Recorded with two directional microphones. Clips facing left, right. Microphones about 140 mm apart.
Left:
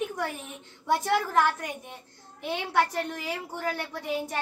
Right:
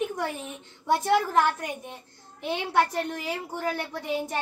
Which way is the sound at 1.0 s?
20° right (ahead or behind).